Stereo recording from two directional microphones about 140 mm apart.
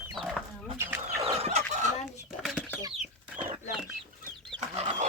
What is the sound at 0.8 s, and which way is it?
Chicken, 20° right (ahead or behind).